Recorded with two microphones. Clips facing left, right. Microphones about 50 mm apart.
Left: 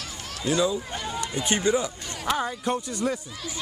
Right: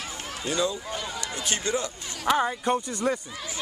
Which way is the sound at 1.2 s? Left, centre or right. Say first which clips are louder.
Left 8 dB; centre.